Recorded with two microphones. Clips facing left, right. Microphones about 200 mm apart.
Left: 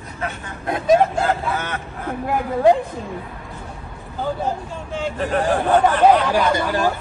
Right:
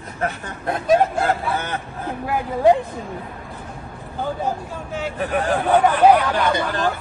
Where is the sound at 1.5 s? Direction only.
30° right (ahead or behind).